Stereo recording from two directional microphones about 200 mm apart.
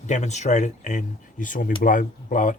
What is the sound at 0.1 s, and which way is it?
Speech, 35° left (ahead or behind).